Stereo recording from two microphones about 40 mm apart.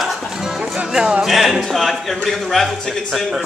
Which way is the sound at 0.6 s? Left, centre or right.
Right.